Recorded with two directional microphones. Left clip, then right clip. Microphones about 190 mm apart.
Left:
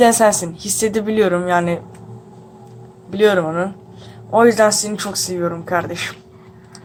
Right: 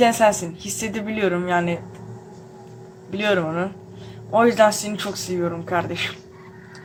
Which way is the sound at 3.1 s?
15° left (ahead or behind).